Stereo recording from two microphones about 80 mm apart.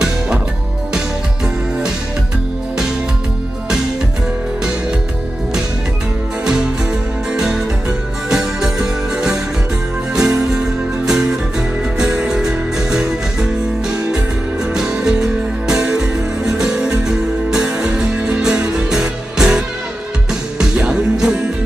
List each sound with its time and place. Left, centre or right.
6.4 s music: centre
14.6 s music: centre